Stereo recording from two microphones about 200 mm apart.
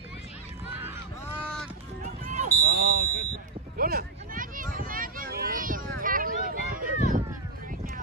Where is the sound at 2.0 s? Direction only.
35° right (ahead or behind).